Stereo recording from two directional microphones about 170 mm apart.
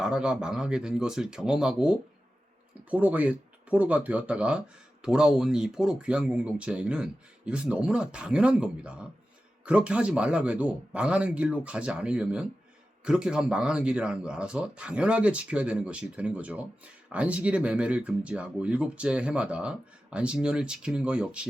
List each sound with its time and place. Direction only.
0.0 s speech: 5° right (ahead or behind)